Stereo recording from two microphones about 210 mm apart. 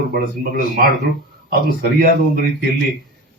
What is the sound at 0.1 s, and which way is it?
Speech, 45° right (ahead or behind).